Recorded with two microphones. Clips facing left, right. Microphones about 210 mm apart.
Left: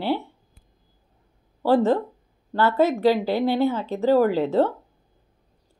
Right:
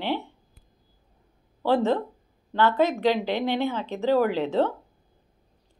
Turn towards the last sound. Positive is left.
turn(degrees=10)  # may be behind; listen again after turning